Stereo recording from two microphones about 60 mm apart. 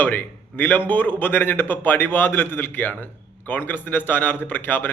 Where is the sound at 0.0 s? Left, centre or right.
Left.